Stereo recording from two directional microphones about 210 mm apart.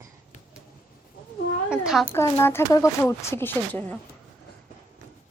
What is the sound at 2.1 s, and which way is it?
Speech, 10° left (ahead or behind).